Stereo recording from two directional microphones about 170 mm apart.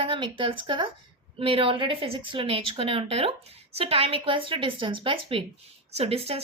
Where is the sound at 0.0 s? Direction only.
30° right (ahead or behind).